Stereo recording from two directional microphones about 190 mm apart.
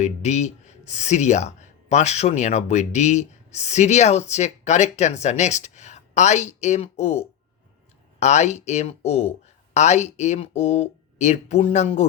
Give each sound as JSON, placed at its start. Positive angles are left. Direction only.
{"t": 0.0, "sound": "speech", "side_deg": 35}